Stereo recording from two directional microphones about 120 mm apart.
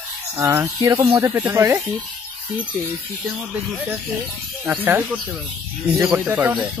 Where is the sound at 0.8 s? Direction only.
35° right (ahead or behind).